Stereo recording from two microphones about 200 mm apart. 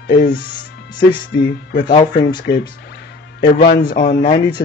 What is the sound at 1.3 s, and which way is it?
Speech, 55° left (ahead or behind).